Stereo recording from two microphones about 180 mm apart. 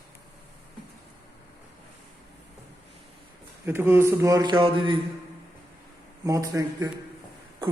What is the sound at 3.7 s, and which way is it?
Speech, 15° right (ahead or behind).